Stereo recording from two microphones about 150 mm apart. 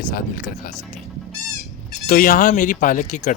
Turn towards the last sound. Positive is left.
turn(degrees=60)  # may be behind; listen again after turning